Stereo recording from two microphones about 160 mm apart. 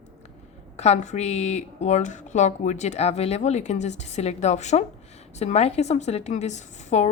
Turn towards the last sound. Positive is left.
turn(degrees=45)  # may be behind; listen again after turning